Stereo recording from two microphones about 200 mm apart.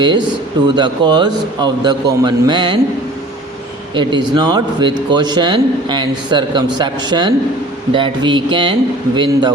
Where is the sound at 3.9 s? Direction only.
25° right (ahead or behind).